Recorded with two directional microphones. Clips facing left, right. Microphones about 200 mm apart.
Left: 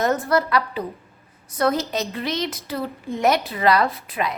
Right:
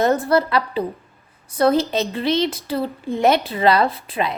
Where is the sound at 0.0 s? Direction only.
30° right (ahead or behind).